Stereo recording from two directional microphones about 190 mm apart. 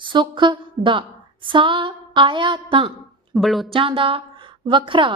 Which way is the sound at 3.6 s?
30° right (ahead or behind).